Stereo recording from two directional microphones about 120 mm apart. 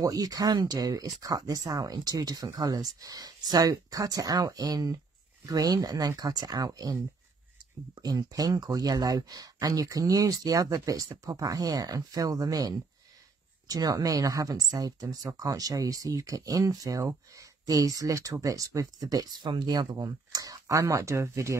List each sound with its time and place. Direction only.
0.0 s speech: 30° right (ahead or behind)